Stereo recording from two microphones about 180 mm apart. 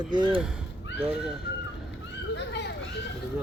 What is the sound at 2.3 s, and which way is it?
Children playing, 70° left (ahead or behind).